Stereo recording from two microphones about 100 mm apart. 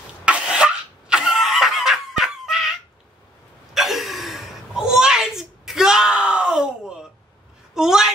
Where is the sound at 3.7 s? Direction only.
Centre (ahead or behind).